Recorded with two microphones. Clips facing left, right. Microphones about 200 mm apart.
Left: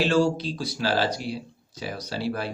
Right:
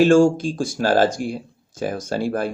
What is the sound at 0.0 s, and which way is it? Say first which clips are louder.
Speech: right 8 dB; 45° right (ahead or behind).